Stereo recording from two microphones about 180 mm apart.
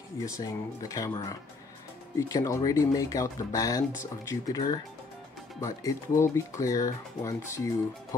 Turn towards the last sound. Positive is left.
turn(degrees=15)  # may be behind; listen again after turning